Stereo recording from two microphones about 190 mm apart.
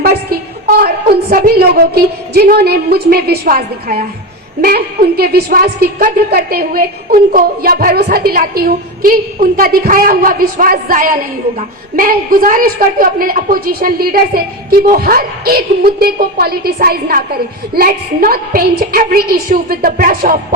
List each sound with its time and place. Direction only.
0.8 s a woman's voice: 55° right (ahead or behind)